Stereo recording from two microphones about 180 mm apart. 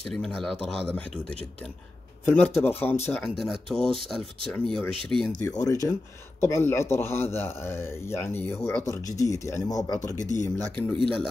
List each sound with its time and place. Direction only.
0.1 s speech: centre (ahead or behind)
2.2 s speech: 10° left (ahead or behind)
3.3 s speech: centre (ahead or behind)
5.6 s speech: 20° left (ahead or behind)